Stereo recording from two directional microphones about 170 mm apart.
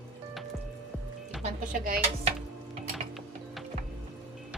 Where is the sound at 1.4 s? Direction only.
55° right (ahead or behind).